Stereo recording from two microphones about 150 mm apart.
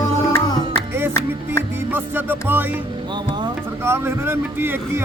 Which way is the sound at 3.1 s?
30° right (ahead or behind).